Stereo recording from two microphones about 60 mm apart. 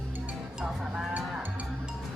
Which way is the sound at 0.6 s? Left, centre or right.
Centre.